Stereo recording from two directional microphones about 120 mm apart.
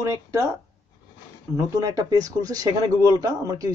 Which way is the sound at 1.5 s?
30° right (ahead or behind).